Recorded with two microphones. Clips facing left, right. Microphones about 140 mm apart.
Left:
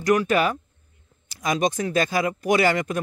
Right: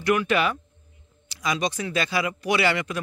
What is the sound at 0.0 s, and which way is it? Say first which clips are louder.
A man's voice: left 2 dB; 40° left (ahead or behind).